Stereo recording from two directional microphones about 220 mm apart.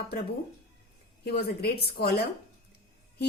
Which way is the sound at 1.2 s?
45° left (ahead or behind).